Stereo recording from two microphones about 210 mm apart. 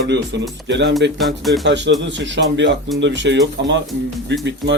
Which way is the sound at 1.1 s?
Centre (ahead or behind).